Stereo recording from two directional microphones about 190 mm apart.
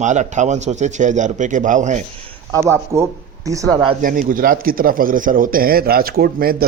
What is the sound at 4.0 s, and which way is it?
A man's voice, 45° right (ahead or behind).